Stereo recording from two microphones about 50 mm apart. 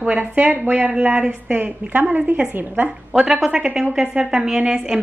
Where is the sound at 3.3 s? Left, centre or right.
Right.